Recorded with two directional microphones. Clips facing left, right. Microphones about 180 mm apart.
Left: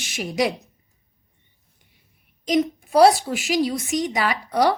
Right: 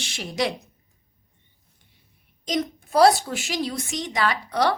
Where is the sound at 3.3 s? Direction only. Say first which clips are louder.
Left 6 dB; 5° left (ahead or behind).